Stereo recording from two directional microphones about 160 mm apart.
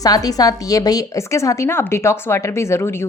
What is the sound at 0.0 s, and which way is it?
A woman's voice, 25° left (ahead or behind).